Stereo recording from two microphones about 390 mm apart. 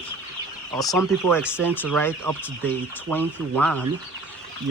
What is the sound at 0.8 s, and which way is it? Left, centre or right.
Speech, centre.